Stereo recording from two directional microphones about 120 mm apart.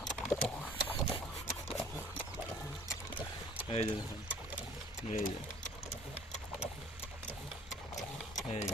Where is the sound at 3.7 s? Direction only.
50° left (ahead or behind).